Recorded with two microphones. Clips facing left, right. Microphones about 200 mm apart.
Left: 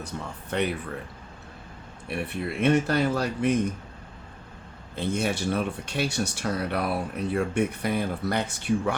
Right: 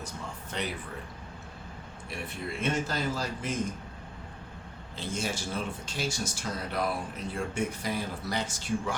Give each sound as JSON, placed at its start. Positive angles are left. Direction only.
{"t": 0.5, "sound": "speech", "side_deg": 60}
{"t": 2.0, "sound": "speech", "side_deg": 60}
{"t": 4.9, "sound": "speech", "side_deg": 60}